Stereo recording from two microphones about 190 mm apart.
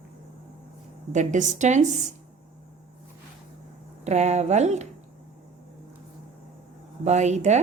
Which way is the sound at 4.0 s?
35° right (ahead or behind).